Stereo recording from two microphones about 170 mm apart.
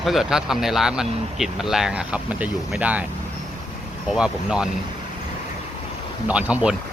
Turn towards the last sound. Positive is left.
turn(degrees=-5)  # may be behind; listen again after turning